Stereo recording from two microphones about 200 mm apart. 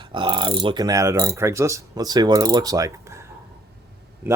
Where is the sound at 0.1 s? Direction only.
25° right (ahead or behind).